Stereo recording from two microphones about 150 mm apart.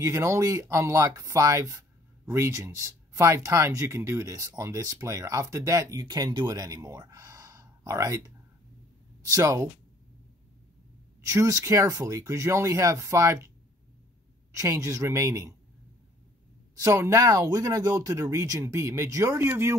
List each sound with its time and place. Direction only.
0.0 s speech: 20° right (ahead or behind)
9.2 s speech: 25° right (ahead or behind)
11.1 s speech: 20° right (ahead or behind)
14.5 s speech: 20° right (ahead or behind)
16.7 s speech: 20° right (ahead or behind)